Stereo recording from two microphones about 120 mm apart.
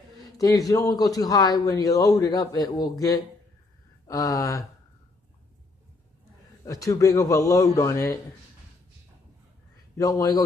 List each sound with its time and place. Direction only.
0.2 s a man's voice: 30° left (ahead or behind)
6.6 s a man's voice: 25° left (ahead or behind)
9.9 s a man's voice: 30° left (ahead or behind)